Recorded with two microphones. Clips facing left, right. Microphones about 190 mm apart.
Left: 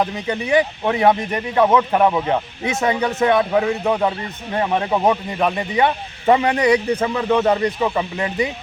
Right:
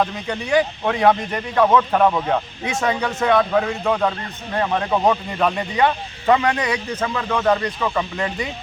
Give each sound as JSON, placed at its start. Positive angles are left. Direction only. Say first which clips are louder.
{"t": 0.0, "sound": "a man's voice", "louder": "left 1 dB", "side_deg": 15}
{"t": 6.2, "sound": "a man's voice", "louder": "left 3 dB", "side_deg": 25}